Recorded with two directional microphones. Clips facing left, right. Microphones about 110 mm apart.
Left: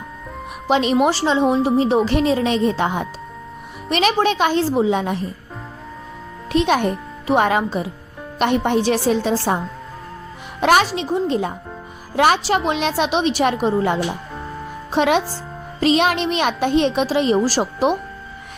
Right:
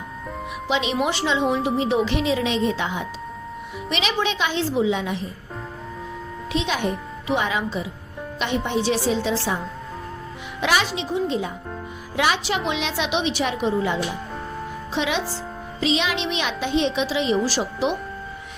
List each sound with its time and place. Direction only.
0.7 s speech: 45° left (ahead or behind)
1.1 s a woman's voice: 35° left (ahead or behind)
6.5 s speech: 50° left (ahead or behind)
10.6 s a woman's voice: 50° left (ahead or behind)